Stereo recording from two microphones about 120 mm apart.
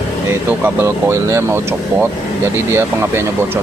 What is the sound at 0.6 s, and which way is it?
Speech, 20° right (ahead or behind).